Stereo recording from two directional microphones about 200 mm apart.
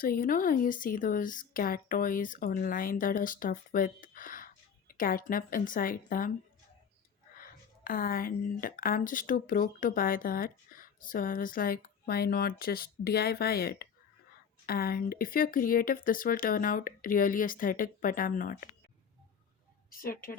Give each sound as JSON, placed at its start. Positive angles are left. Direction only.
{"t": 0.0, "sound": "speech", "side_deg": 45}
{"t": 7.9, "sound": "speech", "side_deg": 45}
{"t": 19.9, "sound": "speech", "side_deg": 45}